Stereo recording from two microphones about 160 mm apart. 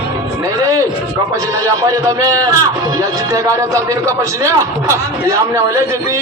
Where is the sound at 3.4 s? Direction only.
20° right (ahead or behind).